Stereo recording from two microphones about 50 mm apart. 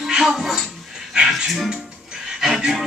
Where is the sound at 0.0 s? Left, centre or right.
Centre.